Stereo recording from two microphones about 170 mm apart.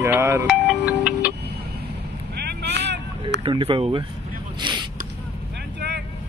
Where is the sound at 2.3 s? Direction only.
75° right (ahead or behind); by 3.3 s 90° right.